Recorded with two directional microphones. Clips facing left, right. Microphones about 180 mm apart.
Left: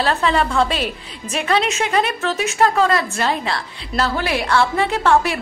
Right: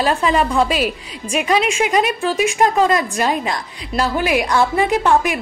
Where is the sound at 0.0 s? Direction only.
10° right (ahead or behind).